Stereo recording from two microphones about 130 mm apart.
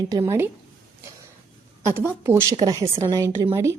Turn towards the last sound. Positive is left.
turn(degrees=-25)  # may be behind; listen again after turning